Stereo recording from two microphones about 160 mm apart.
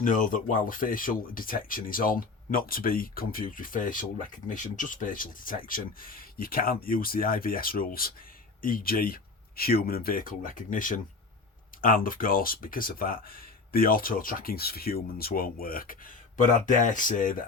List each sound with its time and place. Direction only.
0.0 s speech: 55° left (ahead or behind)